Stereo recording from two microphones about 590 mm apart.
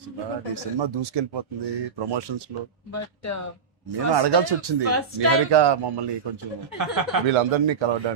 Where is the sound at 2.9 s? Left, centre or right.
Left.